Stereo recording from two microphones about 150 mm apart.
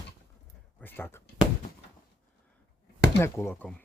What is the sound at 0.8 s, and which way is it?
Speech, 15° left (ahead or behind).